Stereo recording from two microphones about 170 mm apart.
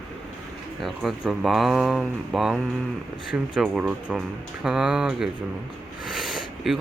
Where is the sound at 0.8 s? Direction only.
Centre (ahead or behind).